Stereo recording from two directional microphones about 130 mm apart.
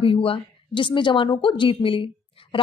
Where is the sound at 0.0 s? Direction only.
45° left (ahead or behind).